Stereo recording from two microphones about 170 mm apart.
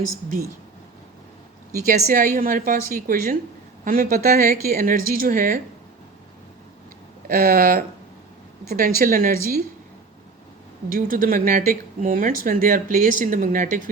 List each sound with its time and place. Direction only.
1.9 s a woman's voice: 55° right (ahead or behind)
7.3 s a woman's voice: 60° right (ahead or behind)
10.8 s speech: 55° right (ahead or behind)